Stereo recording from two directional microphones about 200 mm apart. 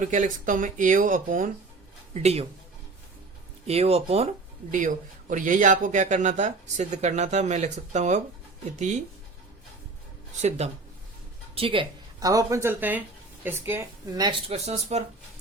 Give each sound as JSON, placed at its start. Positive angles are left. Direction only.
{"t": 0.0, "sound": "speech", "side_deg": -40}
{"t": 2.1, "sound": "speech", "side_deg": -30}
{"t": 3.7, "sound": "speech", "side_deg": -30}
{"t": 11.5, "sound": "speech", "side_deg": -25}